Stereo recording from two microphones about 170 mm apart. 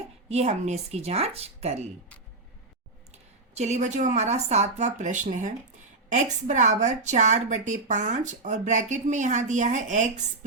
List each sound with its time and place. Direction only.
0.3 s speech: 40° right (ahead or behind)
3.1 s a woman's voice: 40° right (ahead or behind)